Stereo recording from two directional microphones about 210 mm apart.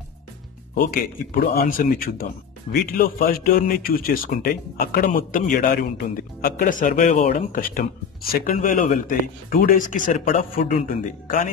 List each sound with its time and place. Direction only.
0.7 s speech: 45° left (ahead or behind)